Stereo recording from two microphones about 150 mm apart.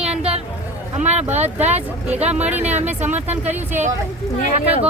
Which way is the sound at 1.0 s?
50° right (ahead or behind).